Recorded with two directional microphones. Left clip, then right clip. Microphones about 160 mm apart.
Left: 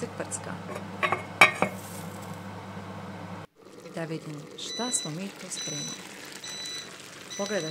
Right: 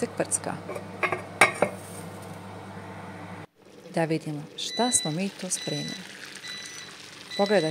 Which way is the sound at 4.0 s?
35° right (ahead or behind).